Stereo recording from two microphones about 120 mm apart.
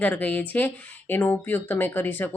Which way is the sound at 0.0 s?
15° left (ahead or behind).